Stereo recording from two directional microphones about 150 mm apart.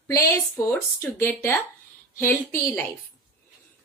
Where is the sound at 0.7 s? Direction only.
15° left (ahead or behind).